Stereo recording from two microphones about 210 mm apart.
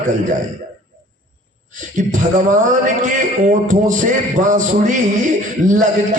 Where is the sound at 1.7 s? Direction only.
35° right (ahead or behind).